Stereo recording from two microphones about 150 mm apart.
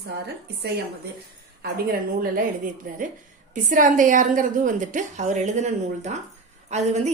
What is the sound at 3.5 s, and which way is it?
A woman's voice, 60° right (ahead or behind).